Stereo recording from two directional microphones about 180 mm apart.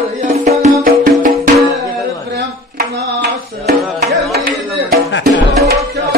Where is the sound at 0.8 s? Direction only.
50° right (ahead or behind).